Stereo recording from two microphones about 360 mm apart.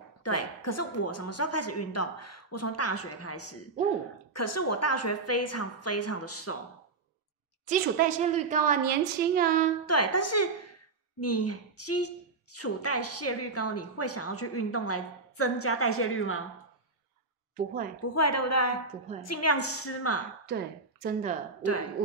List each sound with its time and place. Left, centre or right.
0.2 s a woman's voice: left
7.6 s a woman's voice: centre
9.8 s a woman's voice: left
18.1 s a woman's voice: left
20.4 s a woman's voice: right
21.6 s a woman's voice: left